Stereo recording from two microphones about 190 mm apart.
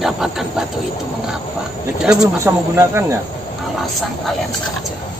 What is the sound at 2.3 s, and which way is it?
Speech, 15° right (ahead or behind).